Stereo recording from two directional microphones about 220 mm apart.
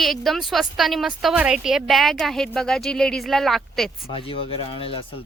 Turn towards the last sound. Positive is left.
turn(degrees=25)  # may be behind; listen again after turning